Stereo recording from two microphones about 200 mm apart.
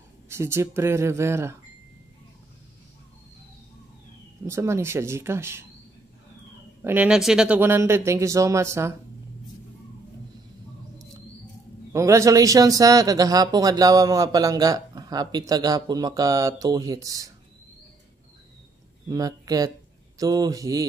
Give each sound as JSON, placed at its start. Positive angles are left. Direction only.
{"t": 0.3, "sound": "a man's voice", "side_deg": -15}
{"t": 4.5, "sound": "a man's voice", "side_deg": -15}
{"t": 6.8, "sound": "a man's voice", "side_deg": -10}
{"t": 11.9, "sound": "a man's voice", "side_deg": -15}
{"t": 19.0, "sound": "a man's voice", "side_deg": -20}